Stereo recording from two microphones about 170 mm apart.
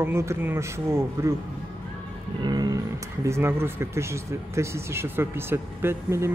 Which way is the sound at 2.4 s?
25° right (ahead or behind).